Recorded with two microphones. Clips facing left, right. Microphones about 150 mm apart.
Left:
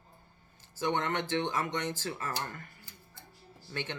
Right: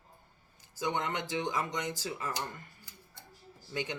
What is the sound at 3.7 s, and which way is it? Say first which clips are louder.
Speech: right 2 dB; 15° right (ahead or behind).